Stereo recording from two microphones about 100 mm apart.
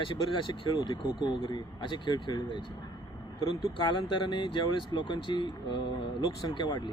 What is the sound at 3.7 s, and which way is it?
Speech, 50° left (ahead or behind).